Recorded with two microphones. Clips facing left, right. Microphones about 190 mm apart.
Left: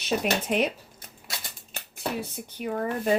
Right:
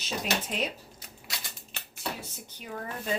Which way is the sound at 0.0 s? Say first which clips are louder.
Left 6 dB; 60° left (ahead or behind).